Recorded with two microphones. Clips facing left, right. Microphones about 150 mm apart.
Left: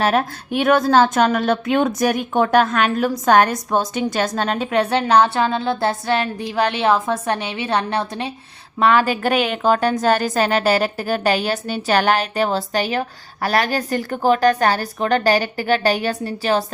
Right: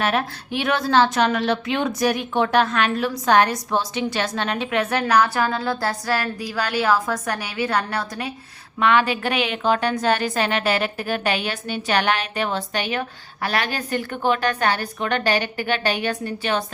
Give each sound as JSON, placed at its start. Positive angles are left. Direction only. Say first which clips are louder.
{"t": 0.0, "sound": "a woman's voice", "louder": "left 4 dB", "side_deg": 40}
{"t": 8.8, "sound": "a woman's voice", "louder": "left 3 dB", "side_deg": 40}